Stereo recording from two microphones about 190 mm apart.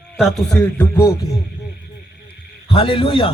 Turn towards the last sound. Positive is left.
turn(degrees=30)  # may be behind; listen again after turning